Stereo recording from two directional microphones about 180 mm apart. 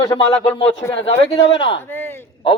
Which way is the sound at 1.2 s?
30° left (ahead or behind).